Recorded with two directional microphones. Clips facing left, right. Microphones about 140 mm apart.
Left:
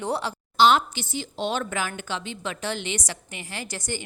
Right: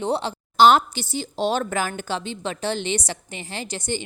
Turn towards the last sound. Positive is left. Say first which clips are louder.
# right 4 dB
turn(degrees=-25)  # may be behind; listen again after turning